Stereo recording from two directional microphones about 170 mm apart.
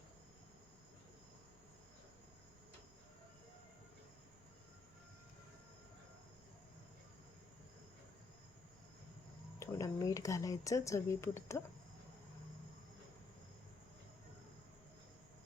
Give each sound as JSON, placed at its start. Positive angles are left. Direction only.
{"t": 9.6, "sound": "speech", "side_deg": 20}